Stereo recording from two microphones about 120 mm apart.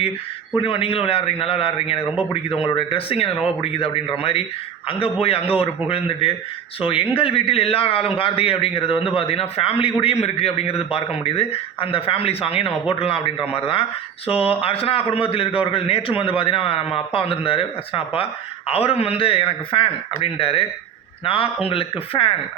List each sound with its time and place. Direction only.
0.5 s a man's voice: 50° left (ahead or behind)